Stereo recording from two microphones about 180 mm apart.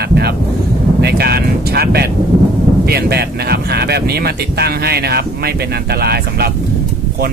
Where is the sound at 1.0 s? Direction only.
60° right (ahead or behind).